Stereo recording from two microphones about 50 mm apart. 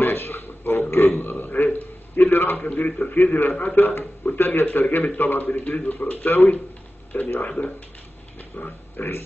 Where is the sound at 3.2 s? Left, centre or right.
Left.